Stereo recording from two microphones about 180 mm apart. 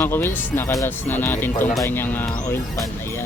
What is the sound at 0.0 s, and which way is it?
Speech, 10° left (ahead or behind).